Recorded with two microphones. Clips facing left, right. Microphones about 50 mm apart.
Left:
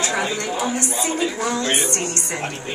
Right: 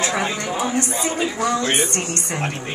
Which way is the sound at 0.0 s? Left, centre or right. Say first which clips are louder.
Even; right.